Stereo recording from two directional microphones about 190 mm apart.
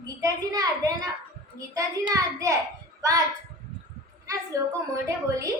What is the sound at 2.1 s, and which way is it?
Speech, 20° right (ahead or behind).